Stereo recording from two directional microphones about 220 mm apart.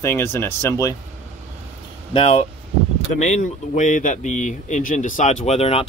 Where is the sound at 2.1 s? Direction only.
25° left (ahead or behind).